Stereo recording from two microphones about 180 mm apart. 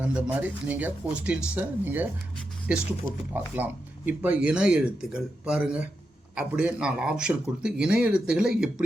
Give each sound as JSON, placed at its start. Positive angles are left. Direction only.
{"t": 0.0, "sound": "speech", "side_deg": -5}